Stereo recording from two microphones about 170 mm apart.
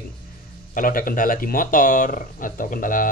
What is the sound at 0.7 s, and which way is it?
Speech, 55° left (ahead or behind).